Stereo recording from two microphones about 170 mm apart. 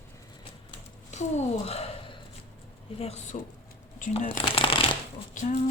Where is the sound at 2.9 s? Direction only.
40° left (ahead or behind).